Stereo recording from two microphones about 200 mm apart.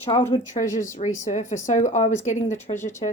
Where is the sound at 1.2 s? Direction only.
40° left (ahead or behind).